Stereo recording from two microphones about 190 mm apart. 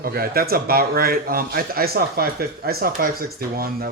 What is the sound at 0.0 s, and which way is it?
Speech, 50° right (ahead or behind).